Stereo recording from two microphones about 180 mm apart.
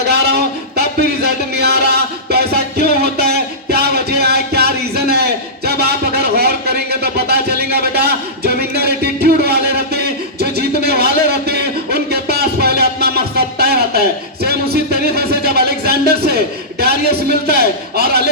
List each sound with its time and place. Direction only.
0.1 s a sound: 65° right (ahead or behind)
14.4 s music: 60° right (ahead or behind)
16.8 s a man's voice: 60° right (ahead or behind)